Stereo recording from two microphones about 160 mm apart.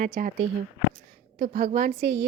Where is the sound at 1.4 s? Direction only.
60° right (ahead or behind).